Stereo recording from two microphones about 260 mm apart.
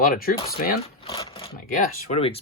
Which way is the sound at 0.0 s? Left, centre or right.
Left.